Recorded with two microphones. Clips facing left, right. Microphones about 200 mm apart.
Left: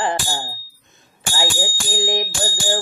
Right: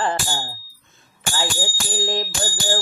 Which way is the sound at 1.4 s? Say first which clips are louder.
Left 3 dB; 15° left (ahead or behind).